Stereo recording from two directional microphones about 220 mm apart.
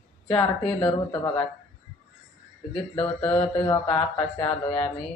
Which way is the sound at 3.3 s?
25° left (ahead or behind).